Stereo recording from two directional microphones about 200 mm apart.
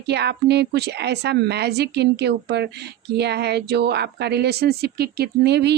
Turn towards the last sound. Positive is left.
turn(degrees=-55)  # may be behind; listen again after turning